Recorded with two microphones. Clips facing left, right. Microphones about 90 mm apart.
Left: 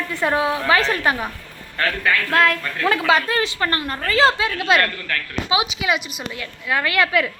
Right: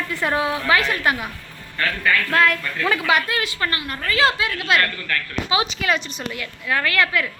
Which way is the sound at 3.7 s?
40° left (ahead or behind).